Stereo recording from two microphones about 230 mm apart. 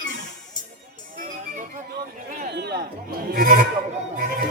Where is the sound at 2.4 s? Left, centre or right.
Right.